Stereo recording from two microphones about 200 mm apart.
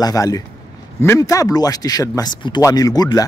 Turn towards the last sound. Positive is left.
turn(degrees=20)  # may be behind; listen again after turning